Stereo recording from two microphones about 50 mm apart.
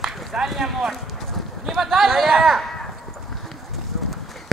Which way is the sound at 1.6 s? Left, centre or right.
Centre.